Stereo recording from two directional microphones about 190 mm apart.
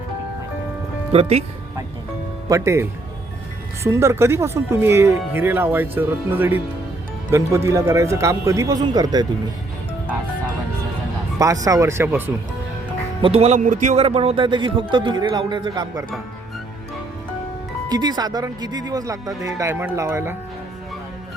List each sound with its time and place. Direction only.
1.1 s speech: 30° right (ahead or behind)
2.5 s speech: 15° right (ahead or behind)
11.6 s speech: 15° right (ahead or behind)
13.2 s a man's voice: 35° right (ahead or behind)
17.8 s a man's voice: 20° right (ahead or behind)